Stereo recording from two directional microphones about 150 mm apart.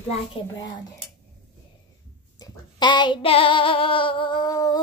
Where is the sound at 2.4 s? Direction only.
30° left (ahead or behind).